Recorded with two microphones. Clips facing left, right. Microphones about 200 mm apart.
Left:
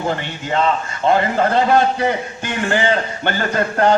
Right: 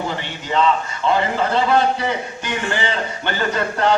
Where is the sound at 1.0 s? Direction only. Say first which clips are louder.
Left 3 dB; 50° left (ahead or behind).